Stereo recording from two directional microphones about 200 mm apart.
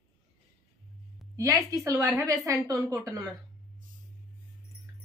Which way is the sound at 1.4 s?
15° right (ahead or behind).